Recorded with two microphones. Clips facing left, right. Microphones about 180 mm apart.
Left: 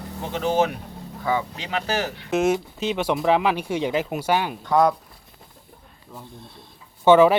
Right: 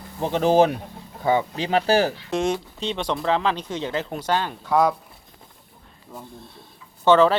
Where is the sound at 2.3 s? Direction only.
5° left (ahead or behind).